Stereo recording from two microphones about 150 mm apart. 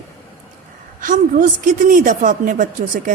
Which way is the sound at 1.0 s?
60° right (ahead or behind).